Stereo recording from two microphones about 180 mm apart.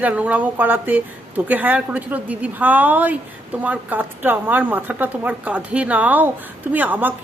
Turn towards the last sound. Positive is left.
turn(degrees=-10)  # may be behind; listen again after turning